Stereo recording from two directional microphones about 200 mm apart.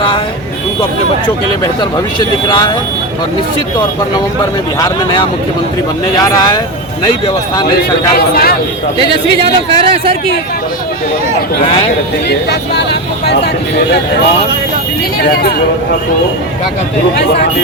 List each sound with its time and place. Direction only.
8.1 s speech: 50° left (ahead or behind)
9.0 s a man's voice: 25° right (ahead or behind)
12.3 s speech: 55° left (ahead or behind)
15.2 s speech: 50° left (ahead or behind)